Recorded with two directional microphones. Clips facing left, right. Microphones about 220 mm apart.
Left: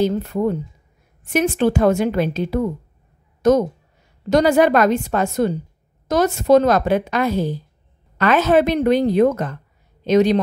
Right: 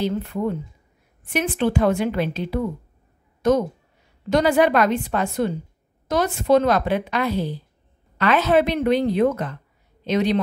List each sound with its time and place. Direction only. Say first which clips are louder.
0.0 s a woman's voice: left 5 dB; 45° left (ahead or behind)